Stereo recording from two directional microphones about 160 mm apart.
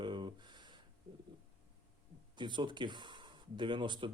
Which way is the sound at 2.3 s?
30° right (ahead or behind).